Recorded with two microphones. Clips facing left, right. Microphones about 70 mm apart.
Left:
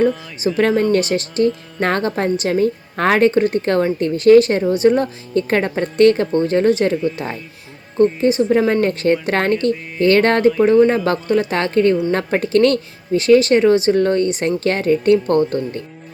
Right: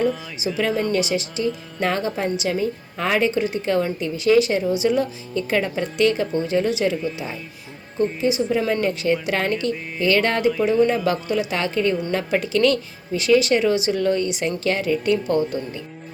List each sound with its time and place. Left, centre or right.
0.3 s speech: left
8.2 s speech: left